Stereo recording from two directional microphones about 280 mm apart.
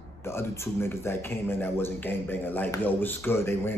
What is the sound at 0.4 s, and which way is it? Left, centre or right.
Speech, centre.